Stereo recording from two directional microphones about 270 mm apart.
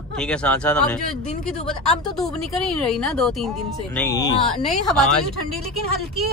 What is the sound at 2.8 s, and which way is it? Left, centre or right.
Speech, centre.